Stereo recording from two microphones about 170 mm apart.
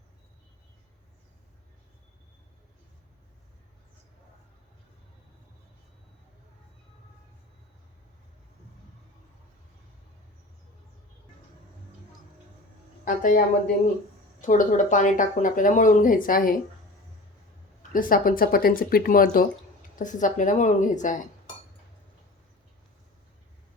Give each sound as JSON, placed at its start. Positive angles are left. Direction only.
{"t": 13.1, "sound": "speech", "side_deg": 50}
{"t": 14.4, "sound": "speech", "side_deg": 50}
{"t": 17.9, "sound": "speech", "side_deg": 55}